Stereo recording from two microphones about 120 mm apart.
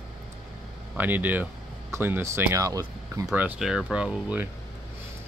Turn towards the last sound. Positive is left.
turn(degrees=-10)  # may be behind; listen again after turning